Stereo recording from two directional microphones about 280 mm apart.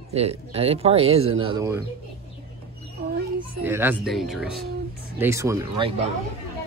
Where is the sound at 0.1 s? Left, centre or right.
Right.